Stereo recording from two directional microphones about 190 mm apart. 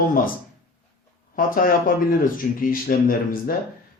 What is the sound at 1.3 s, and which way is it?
Speech, 50° left (ahead or behind).